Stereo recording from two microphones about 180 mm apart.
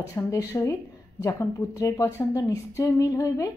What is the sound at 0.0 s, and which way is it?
A woman's voice, 20° left (ahead or behind).